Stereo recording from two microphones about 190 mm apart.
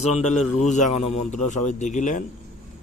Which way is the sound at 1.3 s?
40° left (ahead or behind).